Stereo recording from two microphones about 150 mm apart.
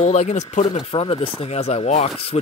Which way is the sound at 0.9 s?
35° left (ahead or behind).